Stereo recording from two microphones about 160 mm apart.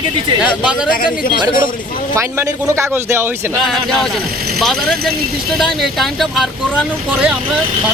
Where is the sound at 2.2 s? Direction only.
20° right (ahead or behind).